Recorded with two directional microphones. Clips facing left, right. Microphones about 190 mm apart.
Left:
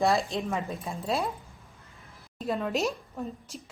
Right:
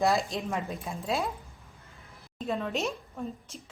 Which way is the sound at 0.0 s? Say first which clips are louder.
Left 1 dB; centre (ahead or behind).